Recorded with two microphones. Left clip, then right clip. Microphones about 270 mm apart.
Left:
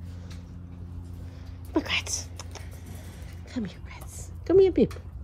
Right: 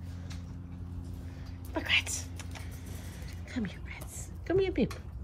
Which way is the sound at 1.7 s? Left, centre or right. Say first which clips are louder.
Left 1 dB; left.